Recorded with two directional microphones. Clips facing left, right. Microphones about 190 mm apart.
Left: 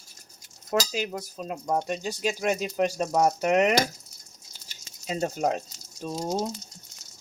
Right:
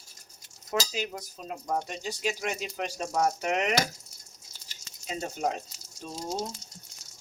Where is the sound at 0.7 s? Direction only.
45° left (ahead or behind).